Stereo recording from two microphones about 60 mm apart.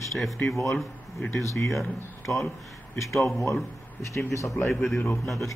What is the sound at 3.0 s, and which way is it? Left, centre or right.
Speech, centre.